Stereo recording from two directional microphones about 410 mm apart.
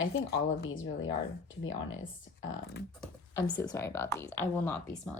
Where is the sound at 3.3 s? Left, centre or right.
Centre.